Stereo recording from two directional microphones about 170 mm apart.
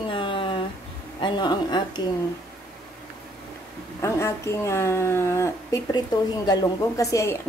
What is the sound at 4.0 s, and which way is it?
A woman's voice, 15° left (ahead or behind).